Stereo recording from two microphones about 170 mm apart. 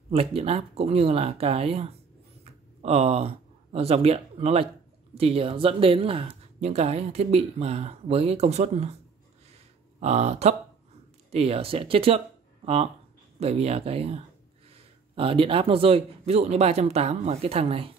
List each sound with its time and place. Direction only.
0.1 s speech: 35° right (ahead or behind)
9.9 s speech: 40° right (ahead or behind)